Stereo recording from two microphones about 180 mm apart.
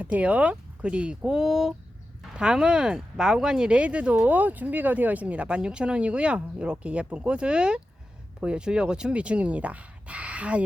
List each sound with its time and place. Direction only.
0.0 s speech: 10° right (ahead or behind)